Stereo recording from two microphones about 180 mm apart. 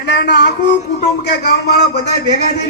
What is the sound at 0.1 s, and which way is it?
Speech, 65° left (ahead or behind).